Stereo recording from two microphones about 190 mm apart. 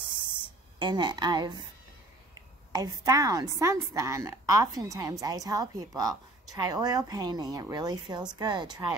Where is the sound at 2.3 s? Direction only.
20° right (ahead or behind).